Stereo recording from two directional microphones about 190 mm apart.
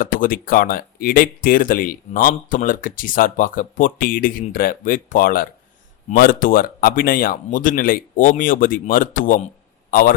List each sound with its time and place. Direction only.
0.0 s speech: 45° left (ahead or behind)